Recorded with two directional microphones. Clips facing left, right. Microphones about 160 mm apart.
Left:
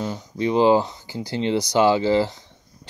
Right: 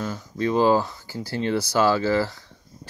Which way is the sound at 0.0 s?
20° left (ahead or behind).